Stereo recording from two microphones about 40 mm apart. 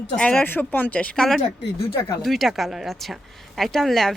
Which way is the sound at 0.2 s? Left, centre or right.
Left.